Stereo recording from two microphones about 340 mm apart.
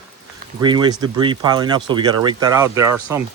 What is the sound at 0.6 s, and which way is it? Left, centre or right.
Speech, centre.